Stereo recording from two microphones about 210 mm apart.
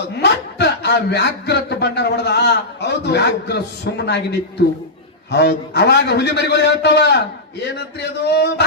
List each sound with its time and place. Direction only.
0.2 s speech: 55° left (ahead or behind)